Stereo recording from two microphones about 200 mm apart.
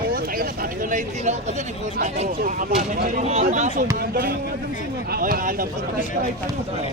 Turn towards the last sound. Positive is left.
turn(degrees=-45)  # may be behind; listen again after turning